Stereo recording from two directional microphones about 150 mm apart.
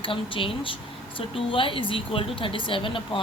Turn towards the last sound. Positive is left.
turn(degrees=35)  # may be behind; listen again after turning